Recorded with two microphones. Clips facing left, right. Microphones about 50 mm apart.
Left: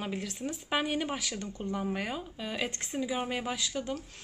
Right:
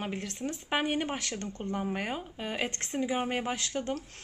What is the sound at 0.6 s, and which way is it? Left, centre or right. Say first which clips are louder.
A woman's voice: right 1 dB; right.